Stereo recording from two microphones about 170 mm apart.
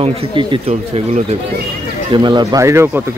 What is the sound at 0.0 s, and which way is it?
Speech, 30° right (ahead or behind).